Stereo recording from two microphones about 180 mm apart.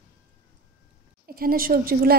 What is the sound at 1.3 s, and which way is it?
Speech, 55° right (ahead or behind).